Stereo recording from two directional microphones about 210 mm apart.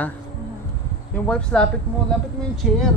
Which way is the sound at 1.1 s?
5° left (ahead or behind).